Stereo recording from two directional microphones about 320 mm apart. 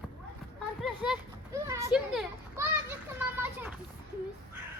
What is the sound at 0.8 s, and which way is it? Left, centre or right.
Children playing, centre.